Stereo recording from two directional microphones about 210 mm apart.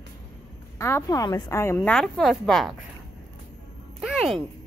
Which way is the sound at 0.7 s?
15° left (ahead or behind).